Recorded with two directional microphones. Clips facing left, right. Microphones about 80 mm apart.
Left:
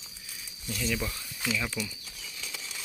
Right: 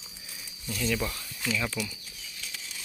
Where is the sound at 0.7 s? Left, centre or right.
Centre.